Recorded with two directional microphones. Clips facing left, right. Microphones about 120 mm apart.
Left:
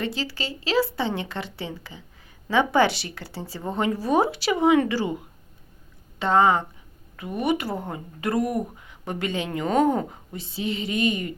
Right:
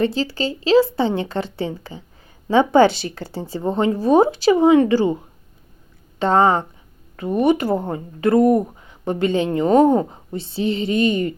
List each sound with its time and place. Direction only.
0.0 s a woman's voice: 30° right (ahead or behind)
6.1 s a woman's voice: 35° right (ahead or behind)